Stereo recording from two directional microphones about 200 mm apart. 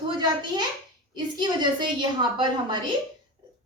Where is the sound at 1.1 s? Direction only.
20° right (ahead or behind).